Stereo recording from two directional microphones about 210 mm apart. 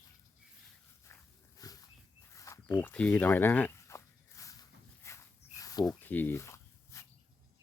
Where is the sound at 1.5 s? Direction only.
15° left (ahead or behind).